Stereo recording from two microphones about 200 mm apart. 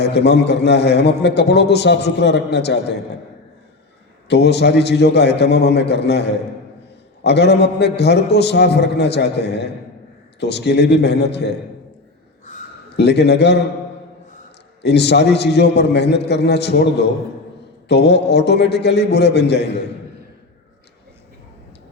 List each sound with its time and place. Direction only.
0.0 s a man's voice: 55° left (ahead or behind)
4.3 s a man's voice: 55° left (ahead or behind)
13.0 s a man's voice: 55° left (ahead or behind)
14.8 s a man's voice: 55° left (ahead or behind)